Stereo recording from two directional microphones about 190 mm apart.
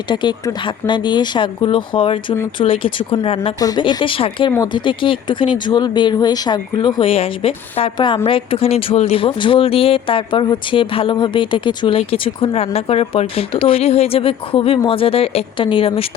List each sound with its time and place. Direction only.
0.1 s speech: 25° left (ahead or behind)